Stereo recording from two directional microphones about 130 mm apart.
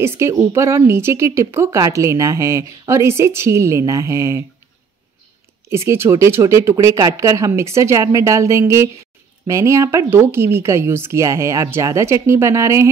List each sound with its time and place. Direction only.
0.0 s speech: 20° right (ahead or behind)
5.7 s speech: 20° right (ahead or behind)